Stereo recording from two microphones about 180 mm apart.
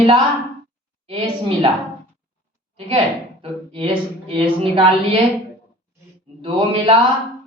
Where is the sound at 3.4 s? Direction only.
30° right (ahead or behind).